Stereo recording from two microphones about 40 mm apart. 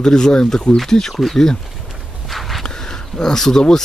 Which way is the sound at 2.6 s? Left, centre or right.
Centre.